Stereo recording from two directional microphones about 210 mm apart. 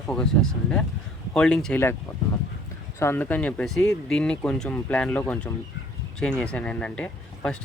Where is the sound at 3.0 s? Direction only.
10° left (ahead or behind).